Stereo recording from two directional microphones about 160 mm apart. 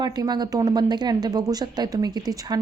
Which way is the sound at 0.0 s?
25° right (ahead or behind).